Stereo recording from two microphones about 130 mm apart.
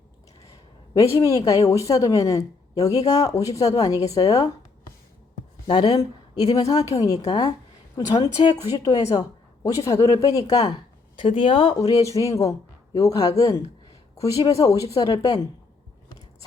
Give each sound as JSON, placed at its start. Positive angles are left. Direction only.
{"t": 0.9, "sound": "speech", "side_deg": 25}
{"t": 5.6, "sound": "speech", "side_deg": 35}